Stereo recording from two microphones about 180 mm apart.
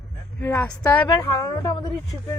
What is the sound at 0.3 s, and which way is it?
Speech, 10° left (ahead or behind).